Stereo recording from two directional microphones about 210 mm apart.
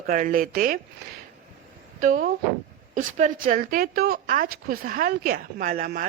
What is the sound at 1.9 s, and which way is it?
A woman's voice, 40° right (ahead or behind).